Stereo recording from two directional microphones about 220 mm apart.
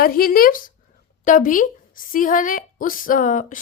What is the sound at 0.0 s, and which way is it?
A woman's voice, 40° left (ahead or behind).